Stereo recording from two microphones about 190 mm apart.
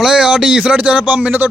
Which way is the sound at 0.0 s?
5° right (ahead or behind).